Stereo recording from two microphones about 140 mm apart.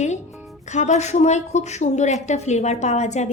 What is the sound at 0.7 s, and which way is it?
Speech, 55° left (ahead or behind).